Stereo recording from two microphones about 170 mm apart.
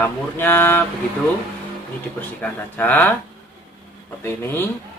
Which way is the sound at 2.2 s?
10° left (ahead or behind).